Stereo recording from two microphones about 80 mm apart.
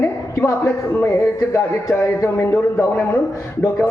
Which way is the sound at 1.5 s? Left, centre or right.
Left.